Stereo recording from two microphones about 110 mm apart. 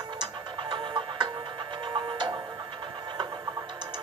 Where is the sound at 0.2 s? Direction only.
40° right (ahead or behind).